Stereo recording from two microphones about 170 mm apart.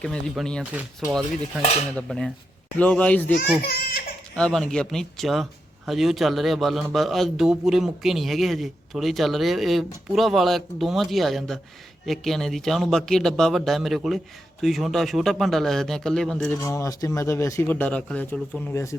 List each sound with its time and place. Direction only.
0.0 s a man's voice: 5° left (ahead or behind)
0.6 s speech: 10° right (ahead or behind)
1.4 s cutlery: 40° left (ahead or behind)
2.0 s a man's voice: centre (ahead or behind)
3.6 s baby laughter: 65° left (ahead or behind)
4.4 s a man's voice: 5° left (ahead or behind)
16.6 s speech: 20° left (ahead or behind)